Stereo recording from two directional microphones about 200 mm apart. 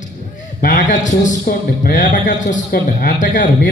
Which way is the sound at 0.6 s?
40° left (ahead or behind).